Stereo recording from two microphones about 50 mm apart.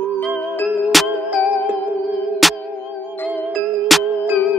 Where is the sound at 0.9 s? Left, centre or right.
Centre.